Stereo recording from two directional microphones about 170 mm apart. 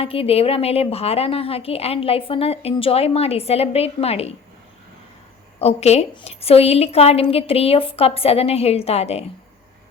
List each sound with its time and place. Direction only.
0.0 s a woman's voice: 35° left (ahead or behind)
5.5 s a woman's voice: 40° left (ahead or behind)